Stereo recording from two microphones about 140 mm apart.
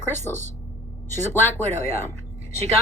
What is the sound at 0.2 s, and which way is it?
Speech, 15° left (ahead or behind).